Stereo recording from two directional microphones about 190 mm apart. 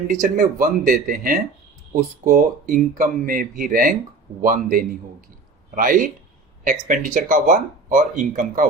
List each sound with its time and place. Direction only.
0.1 s speech: 45° right (ahead or behind)